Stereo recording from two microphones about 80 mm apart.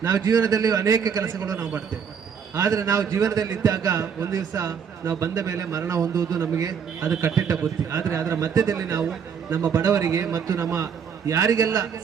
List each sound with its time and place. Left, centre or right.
0.0 s a man's voice: right
2.6 s a man's voice: right
9.5 s a man's voice: right